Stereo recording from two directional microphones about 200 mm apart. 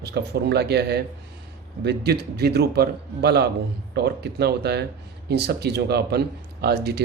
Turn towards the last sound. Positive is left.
turn(degrees=-55)  # may be behind; listen again after turning